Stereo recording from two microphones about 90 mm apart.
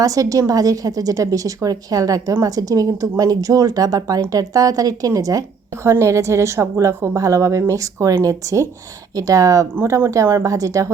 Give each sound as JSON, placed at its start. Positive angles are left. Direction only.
{"t": 0.0, "sound": "a woman's voice", "side_deg": -40}